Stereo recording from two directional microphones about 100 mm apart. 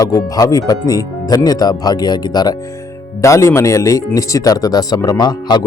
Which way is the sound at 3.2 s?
30° left (ahead or behind).